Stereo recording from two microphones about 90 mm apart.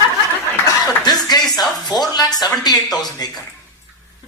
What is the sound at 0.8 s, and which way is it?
Speech, 50° left (ahead or behind).